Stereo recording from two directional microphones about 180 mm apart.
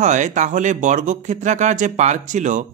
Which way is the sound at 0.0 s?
40° right (ahead or behind).